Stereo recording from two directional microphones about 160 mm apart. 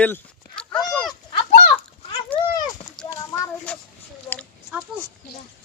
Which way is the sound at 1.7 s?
35° left (ahead or behind).